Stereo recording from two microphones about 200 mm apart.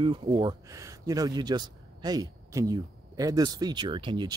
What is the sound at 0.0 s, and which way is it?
Speech, 25° right (ahead or behind).